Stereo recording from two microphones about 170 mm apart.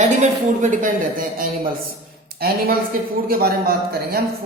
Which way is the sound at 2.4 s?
65° right (ahead or behind).